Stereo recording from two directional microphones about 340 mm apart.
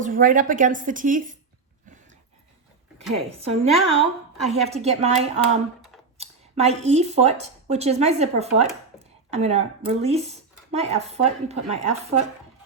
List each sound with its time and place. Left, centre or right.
0.0 s speech: right
3.2 s a woman's voice: centre